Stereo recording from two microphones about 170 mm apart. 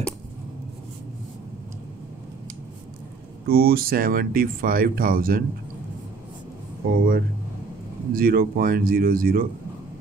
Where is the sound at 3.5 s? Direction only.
60° right (ahead or behind).